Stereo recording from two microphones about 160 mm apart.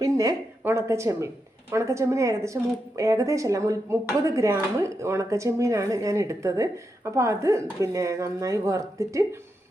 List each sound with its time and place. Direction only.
0.0 s a woman's voice: 20° right (ahead or behind)